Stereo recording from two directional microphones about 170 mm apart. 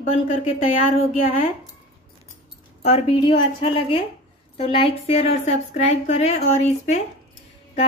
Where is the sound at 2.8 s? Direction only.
35° left (ahead or behind).